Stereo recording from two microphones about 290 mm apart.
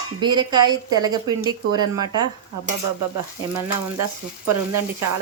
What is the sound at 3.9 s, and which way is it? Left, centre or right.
Speech, right.